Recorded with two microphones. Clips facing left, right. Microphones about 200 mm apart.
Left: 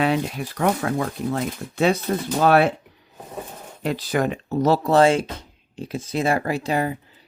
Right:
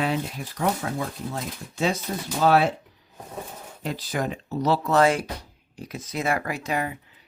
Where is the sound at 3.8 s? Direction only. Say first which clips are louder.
Left 6 dB; 70° left (ahead or behind).